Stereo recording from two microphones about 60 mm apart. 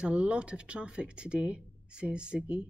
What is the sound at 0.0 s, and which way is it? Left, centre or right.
Speech, centre.